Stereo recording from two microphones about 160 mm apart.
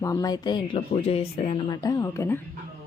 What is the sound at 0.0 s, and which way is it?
Speech, 20° left (ahead or behind).